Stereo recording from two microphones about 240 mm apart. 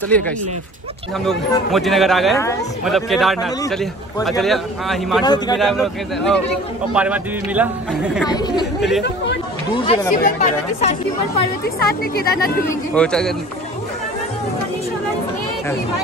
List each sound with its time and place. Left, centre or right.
0.1 s a man's voice: centre
5.2 s speech: centre
5.6 s a man's voice: centre
8.3 s speech: centre
9.7 s speech: centre
10.2 s speech: left
11.8 s speech: left
12.9 s a man's voice: centre